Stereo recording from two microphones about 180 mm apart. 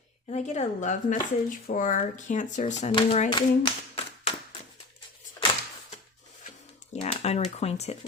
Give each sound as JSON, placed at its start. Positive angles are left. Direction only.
{"t": 0.3, "sound": "speech", "side_deg": 40}
{"t": 2.9, "sound": "a child's voice", "side_deg": 30}
{"t": 6.9, "sound": "speech", "side_deg": 35}